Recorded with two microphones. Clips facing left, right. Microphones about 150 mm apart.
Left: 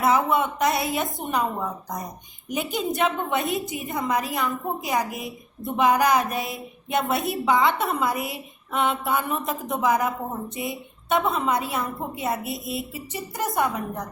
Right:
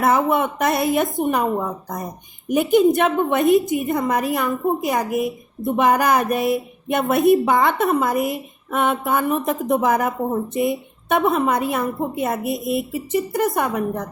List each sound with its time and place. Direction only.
0.0 s a woman's voice: 55° right (ahead or behind)
2.5 s a woman's voice: 55° right (ahead or behind)